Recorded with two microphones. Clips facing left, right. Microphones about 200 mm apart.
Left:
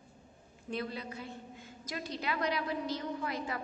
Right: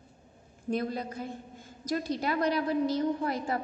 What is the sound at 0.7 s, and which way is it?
A woman's voice, 45° right (ahead or behind).